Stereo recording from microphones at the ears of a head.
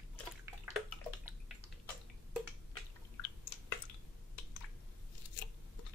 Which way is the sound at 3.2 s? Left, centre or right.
Left.